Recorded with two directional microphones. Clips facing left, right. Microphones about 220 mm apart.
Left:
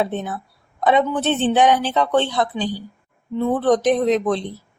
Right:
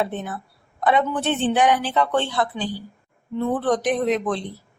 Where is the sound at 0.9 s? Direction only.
20° left (ahead or behind).